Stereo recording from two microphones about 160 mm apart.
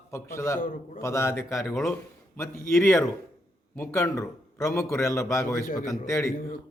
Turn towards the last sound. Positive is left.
turn(degrees=20)  # may be behind; listen again after turning